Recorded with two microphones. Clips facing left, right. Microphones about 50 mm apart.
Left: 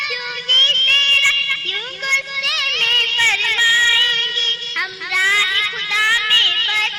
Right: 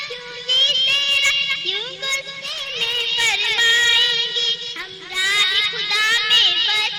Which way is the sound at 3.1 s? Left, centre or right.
Left.